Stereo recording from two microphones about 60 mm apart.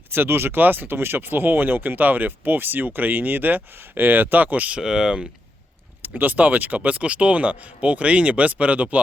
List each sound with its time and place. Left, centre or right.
0.1 s speech: right
4.8 s speech: centre
6.0 s speech: right